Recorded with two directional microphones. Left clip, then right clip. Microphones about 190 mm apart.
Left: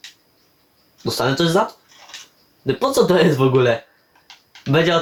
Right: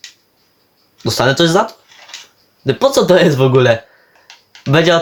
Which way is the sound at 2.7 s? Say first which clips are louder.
Right 5 dB; 50° right (ahead or behind).